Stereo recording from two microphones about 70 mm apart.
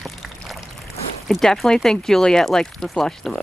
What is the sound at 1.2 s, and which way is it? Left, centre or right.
Speech, centre.